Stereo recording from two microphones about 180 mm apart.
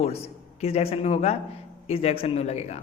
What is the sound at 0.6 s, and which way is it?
Speech, 35° left (ahead or behind).